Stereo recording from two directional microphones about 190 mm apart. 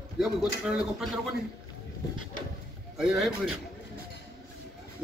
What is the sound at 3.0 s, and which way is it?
Speech, 5° right (ahead or behind).